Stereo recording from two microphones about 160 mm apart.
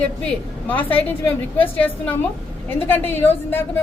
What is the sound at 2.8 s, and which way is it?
Speech, 10° left (ahead or behind).